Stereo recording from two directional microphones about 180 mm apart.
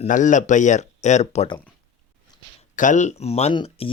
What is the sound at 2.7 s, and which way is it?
Speech, 45° left (ahead or behind).